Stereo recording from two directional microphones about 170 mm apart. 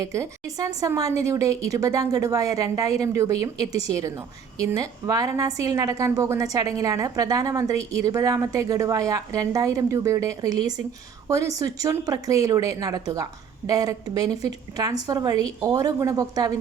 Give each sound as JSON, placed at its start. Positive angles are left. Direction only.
{"t": 0.0, "sound": "a woman's voice", "side_deg": -20}